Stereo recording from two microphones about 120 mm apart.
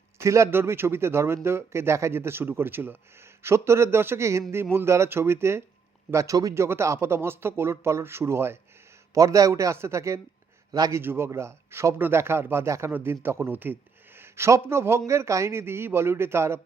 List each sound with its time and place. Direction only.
0.2 s a man's voice: 25° right (ahead or behind)
11.0 s speech: 20° right (ahead or behind)